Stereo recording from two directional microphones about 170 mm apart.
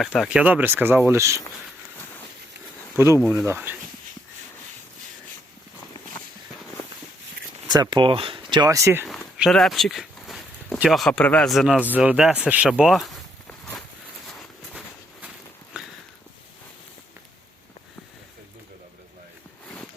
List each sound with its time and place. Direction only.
0.0 s speech: 5° right (ahead or behind)
2.9 s speech: 15° right (ahead or behind)
7.7 s speech: 25° right (ahead or behind)
9.0 s speech: centre (ahead or behind)
14.7 s a sound: 5° right (ahead or behind)